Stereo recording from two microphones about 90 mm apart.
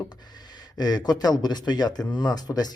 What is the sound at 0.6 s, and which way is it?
Speech, 45° left (ahead or behind).